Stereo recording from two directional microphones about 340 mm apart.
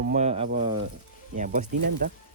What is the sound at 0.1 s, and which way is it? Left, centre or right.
Speech, centre.